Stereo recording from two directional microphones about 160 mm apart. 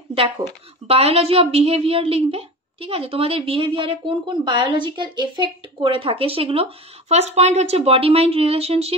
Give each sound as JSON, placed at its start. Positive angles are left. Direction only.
{"t": 0.8, "sound": "a woman's voice", "side_deg": -40}